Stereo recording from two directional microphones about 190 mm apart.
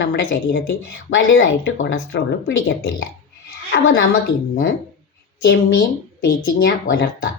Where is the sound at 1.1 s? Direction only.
85° left.